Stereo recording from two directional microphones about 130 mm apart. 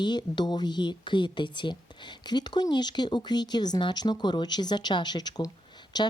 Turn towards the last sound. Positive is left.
turn(degrees=30)  # may be behind; listen again after turning